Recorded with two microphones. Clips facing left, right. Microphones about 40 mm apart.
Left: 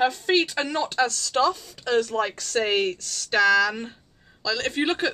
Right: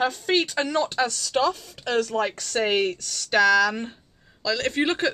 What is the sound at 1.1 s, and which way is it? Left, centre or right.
Speech, centre.